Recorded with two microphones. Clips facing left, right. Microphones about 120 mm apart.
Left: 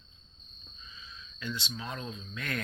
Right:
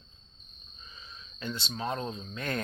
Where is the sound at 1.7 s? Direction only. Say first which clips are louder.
Right 6 dB; 40° right (ahead or behind).